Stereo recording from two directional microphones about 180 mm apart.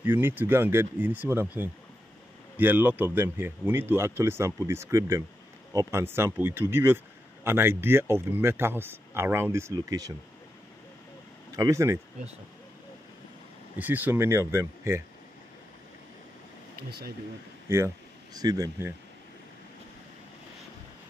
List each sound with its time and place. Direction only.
0.0 s speech: 10° right (ahead or behind)
11.5 s speech: 20° right (ahead or behind)
13.7 s speech: 10° right (ahead or behind)
17.6 s speech: 15° right (ahead or behind)